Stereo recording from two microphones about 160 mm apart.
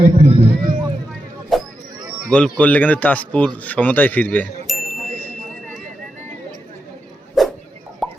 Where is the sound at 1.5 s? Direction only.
Centre (ahead or behind).